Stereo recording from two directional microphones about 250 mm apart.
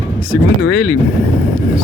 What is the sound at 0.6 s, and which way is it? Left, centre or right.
Speech, left.